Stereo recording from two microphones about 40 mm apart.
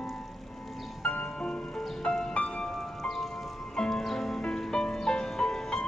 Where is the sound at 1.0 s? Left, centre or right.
Left.